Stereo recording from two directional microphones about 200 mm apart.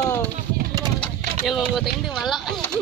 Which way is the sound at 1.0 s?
Centre (ahead or behind).